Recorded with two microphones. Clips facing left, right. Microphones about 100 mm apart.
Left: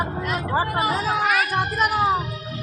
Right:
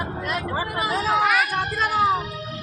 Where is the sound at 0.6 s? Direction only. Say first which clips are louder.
Left 4 dB; 45° left (ahead or behind).